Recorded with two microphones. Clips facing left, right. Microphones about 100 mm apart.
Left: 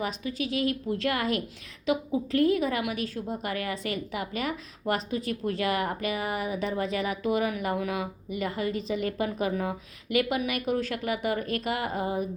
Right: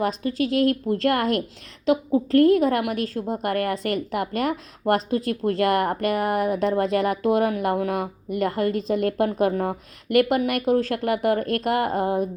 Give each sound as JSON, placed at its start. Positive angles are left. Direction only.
{"t": 0.0, "sound": "a woman's voice", "side_deg": -50}
{"t": 10.9, "sound": "a woman's voice", "side_deg": -55}